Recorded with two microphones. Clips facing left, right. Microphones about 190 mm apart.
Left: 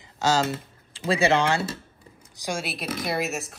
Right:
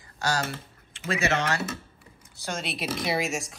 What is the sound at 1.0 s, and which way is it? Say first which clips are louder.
Speech: left 5 dB; 30° left (ahead or behind).